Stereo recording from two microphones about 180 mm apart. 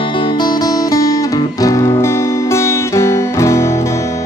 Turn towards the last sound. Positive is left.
turn(degrees=15)  # may be behind; listen again after turning